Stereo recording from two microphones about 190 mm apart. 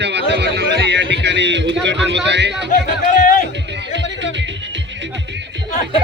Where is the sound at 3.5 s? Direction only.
65° right (ahead or behind).